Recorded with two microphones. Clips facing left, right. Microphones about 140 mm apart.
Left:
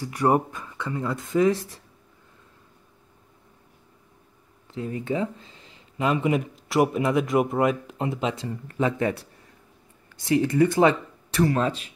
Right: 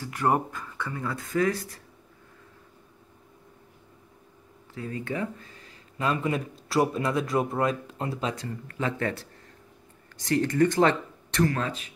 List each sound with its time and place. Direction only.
0.0 s speech: 15° left (ahead or behind)
4.7 s speech: 20° left (ahead or behind)
10.2 s speech: 10° left (ahead or behind)
11.5 s speech: 25° left (ahead or behind)